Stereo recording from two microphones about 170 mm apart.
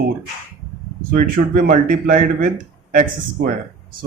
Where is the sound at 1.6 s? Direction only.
50° right (ahead or behind).